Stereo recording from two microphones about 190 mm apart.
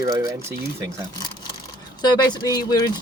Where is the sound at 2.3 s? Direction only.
20° left (ahead or behind).